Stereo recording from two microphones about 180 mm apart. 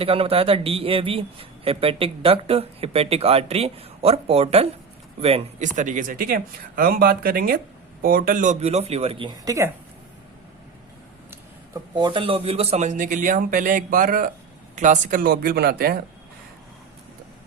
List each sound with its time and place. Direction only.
0.0 s a man's voice: 30° right (ahead or behind)
11.3 s a man's voice: 20° right (ahead or behind); by 16.0 s 60° right (ahead or behind)